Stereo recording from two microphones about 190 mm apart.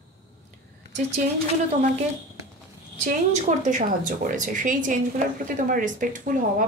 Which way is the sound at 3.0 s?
40° right (ahead or behind).